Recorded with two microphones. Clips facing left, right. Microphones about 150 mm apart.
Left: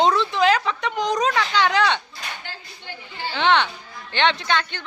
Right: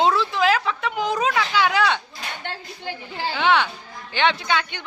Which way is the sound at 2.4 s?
80° right.